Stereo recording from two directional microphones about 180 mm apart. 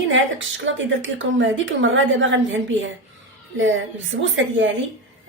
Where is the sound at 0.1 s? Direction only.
90° right.